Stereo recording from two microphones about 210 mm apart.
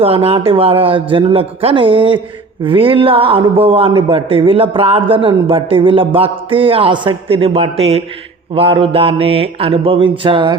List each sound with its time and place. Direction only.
0.0 s speech: 25° right (ahead or behind)